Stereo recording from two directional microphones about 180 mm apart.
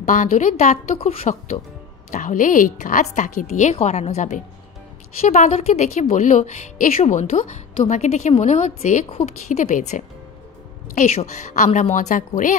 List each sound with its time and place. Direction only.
0.0 s a woman's voice: 45° left (ahead or behind)
2.1 s a woman's voice: 45° left (ahead or behind)